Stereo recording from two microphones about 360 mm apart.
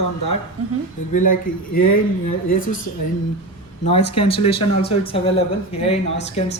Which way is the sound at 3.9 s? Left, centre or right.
Centre.